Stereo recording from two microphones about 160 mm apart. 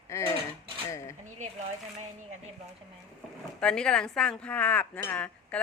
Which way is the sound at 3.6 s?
5° left (ahead or behind).